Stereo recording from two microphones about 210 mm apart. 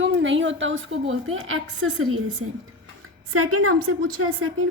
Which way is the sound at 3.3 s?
90° right.